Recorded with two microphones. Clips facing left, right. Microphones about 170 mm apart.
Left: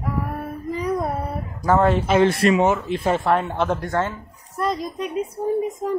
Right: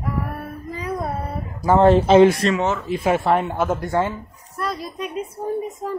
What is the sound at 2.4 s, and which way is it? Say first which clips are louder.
Speech: left 3 dB; 15° left (ahead or behind).